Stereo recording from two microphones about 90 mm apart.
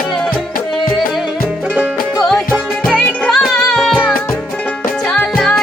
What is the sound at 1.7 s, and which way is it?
Music, 15° right (ahead or behind).